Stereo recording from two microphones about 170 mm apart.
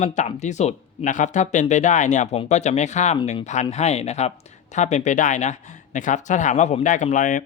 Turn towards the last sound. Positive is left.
turn(degrees=50)  # may be behind; listen again after turning